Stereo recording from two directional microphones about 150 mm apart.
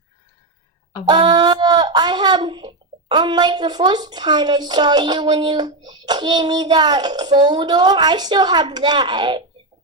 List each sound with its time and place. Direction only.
1.0 s speech: 30° right (ahead or behind)